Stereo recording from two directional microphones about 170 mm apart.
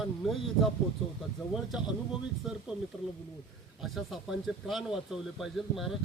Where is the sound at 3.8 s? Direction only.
Centre (ahead or behind).